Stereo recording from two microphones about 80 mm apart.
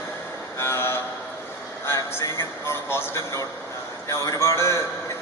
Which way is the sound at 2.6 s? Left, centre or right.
Left.